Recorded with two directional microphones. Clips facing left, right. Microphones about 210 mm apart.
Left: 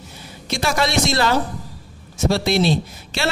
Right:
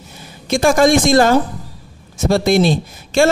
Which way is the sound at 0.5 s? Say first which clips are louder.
Right 10 dB; 50° right (ahead or behind).